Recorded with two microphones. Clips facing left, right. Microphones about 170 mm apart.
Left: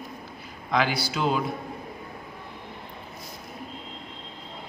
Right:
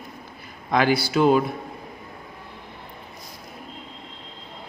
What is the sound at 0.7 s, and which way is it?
Speech, 50° right (ahead or behind).